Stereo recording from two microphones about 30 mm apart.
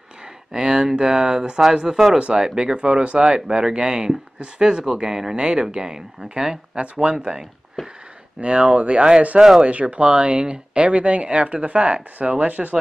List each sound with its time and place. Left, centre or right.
0.5 s speech: right
1.9 s speech: centre
2.3 s speech: right
6.8 s speech: right
7.8 s a sound: centre
8.4 s speech: right
9.3 s speech: right
9.7 s speech: right
10.0 s speech: right